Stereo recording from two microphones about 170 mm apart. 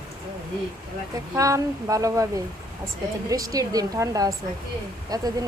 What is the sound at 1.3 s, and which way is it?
Speech, 20° right (ahead or behind).